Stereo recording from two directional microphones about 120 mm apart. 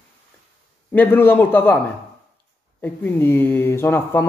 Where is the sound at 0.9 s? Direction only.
15° left (ahead or behind).